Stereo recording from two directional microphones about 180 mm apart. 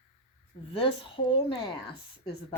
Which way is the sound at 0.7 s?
30° left (ahead or behind).